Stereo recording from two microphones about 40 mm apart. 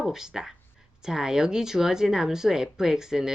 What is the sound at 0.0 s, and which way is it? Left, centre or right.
Speech, centre.